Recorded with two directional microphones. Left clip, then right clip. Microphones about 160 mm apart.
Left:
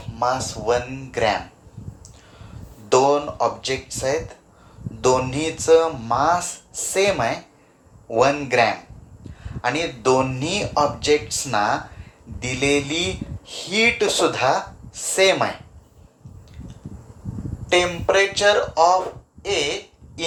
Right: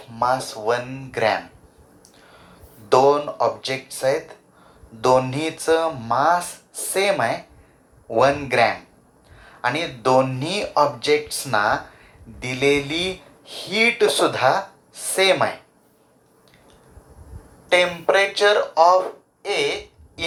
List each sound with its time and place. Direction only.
0.2 s speech: 45° right (ahead or behind)
2.9 s speech: 45° right (ahead or behind)
17.7 s speech: 40° right (ahead or behind)